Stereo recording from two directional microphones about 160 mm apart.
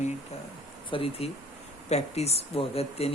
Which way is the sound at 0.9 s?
35° left (ahead or behind).